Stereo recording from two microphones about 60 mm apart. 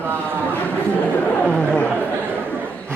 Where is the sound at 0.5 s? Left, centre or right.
Left.